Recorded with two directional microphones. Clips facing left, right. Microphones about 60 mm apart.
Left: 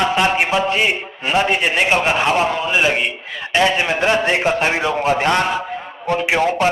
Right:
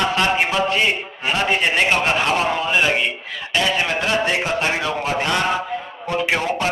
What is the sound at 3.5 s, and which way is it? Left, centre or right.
A man's voice, left.